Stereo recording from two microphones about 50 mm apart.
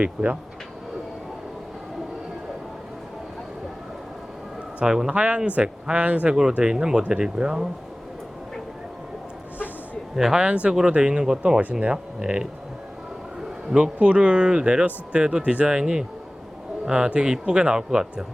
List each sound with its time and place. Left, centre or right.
0.0 s speech: right
4.8 s speech: centre
5.1 s speech: right
6.6 s speech: centre
10.2 s speech: centre
10.4 s speech: right
13.7 s speech: right